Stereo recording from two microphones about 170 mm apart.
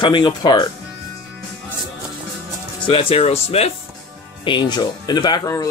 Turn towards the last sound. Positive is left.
turn(degrees=20)  # may be behind; listen again after turning